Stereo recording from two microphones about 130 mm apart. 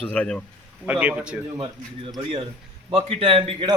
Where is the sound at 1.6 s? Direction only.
35° right (ahead or behind).